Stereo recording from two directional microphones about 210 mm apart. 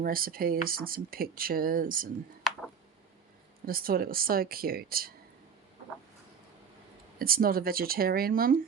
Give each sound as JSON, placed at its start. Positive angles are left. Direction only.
{"t": 0.0, "sound": "speech", "side_deg": -45}
{"t": 2.5, "sound": "a sound", "side_deg": 0}
{"t": 3.7, "sound": "speech", "side_deg": -45}
{"t": 7.2, "sound": "speech", "side_deg": -45}